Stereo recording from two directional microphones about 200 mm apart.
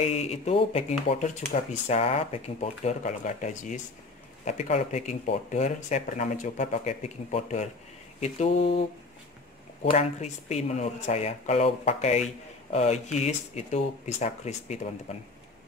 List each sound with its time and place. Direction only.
0.0 s speech: 30° left (ahead or behind)
9.8 s speech: 35° left (ahead or behind)